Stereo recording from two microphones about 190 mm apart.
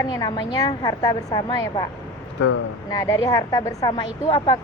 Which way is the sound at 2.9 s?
15° left (ahead or behind).